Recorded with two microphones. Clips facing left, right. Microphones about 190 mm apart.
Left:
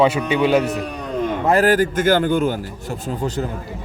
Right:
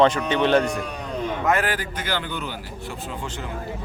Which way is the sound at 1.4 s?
40° left (ahead or behind).